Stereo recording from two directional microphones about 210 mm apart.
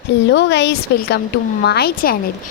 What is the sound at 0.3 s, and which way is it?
A woman's voice, 55° left (ahead or behind).